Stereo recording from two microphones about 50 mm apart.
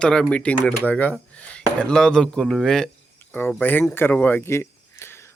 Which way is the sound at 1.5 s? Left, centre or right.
Centre.